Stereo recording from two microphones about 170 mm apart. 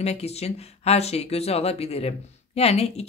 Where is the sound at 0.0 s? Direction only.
40° left (ahead or behind).